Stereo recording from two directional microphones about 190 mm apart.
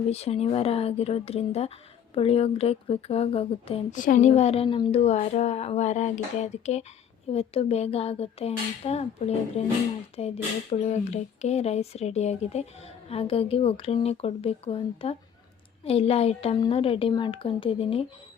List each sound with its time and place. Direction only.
0.1 s a woman's voice: 35° left (ahead or behind)
4.0 s a woman's voice: 40° left (ahead or behind)